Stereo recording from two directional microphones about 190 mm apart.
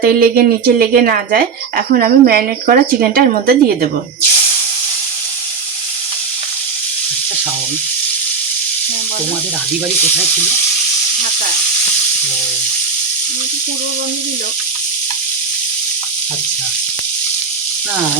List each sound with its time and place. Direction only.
0.0 s speech: 50° right (ahead or behind)